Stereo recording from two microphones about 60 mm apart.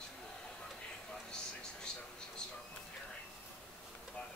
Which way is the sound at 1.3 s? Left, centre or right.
Centre.